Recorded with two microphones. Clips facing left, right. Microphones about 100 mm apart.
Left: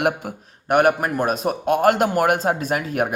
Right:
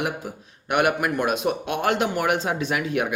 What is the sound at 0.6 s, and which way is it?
A man's voice, 40° left (ahead or behind).